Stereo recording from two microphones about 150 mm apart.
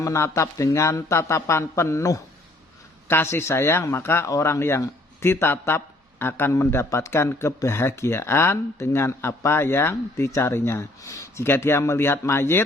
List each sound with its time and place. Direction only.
0.0 s speech: 20° left (ahead or behind)